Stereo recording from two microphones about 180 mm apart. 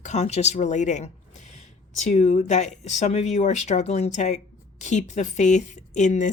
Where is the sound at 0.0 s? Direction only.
40° left (ahead or behind).